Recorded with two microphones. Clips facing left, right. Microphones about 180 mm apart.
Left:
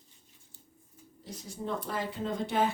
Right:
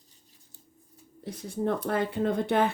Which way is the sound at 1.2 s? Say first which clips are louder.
Right 9 dB; 60° right (ahead or behind).